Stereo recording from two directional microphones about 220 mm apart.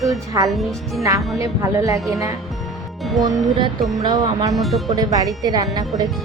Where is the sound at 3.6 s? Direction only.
20° right (ahead or behind).